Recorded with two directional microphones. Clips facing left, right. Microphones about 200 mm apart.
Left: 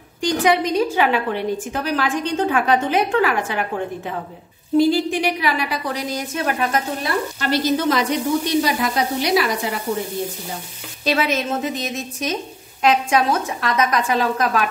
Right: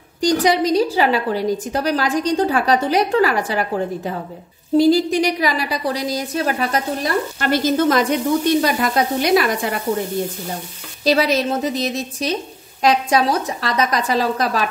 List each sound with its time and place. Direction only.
0.2 s a woman's voice: 35° right (ahead or behind)
7.3 s sizzle: 50° right (ahead or behind)
11.1 s a woman's voice: 35° right (ahead or behind)